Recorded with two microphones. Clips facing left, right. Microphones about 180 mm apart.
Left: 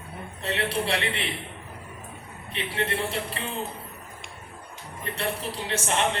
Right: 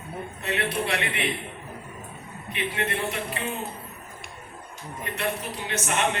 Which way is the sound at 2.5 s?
30° left (ahead or behind).